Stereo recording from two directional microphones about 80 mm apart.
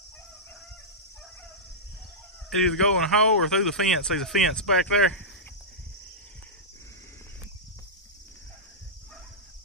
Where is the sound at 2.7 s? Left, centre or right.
Centre.